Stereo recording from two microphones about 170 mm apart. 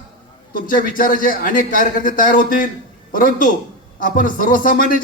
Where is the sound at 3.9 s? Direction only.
55° left (ahead or behind).